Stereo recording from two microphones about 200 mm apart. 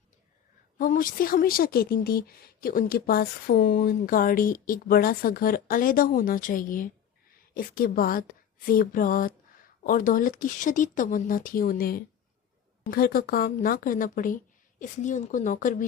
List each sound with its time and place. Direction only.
0.8 s speech: 45° left (ahead or behind)